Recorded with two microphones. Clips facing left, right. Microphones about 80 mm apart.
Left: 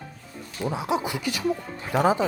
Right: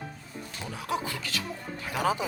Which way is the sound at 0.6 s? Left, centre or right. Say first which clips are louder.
Left 7 dB; centre.